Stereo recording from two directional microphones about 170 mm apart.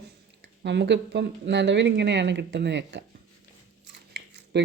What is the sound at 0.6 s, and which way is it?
Speech, 90° right.